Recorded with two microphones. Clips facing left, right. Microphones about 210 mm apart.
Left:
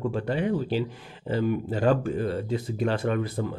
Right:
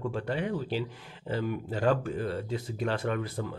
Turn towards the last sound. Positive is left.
turn(degrees=30)  # may be behind; listen again after turning